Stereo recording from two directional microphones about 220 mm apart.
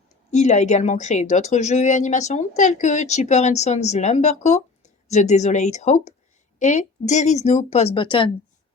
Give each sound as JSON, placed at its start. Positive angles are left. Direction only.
{"t": 0.3, "sound": "speech", "side_deg": 30}